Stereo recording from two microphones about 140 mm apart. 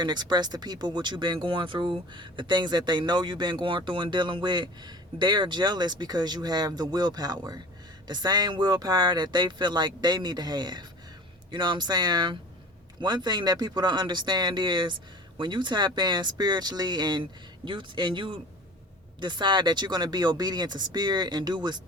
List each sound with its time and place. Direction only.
0.0 s speech: 30° right (ahead or behind)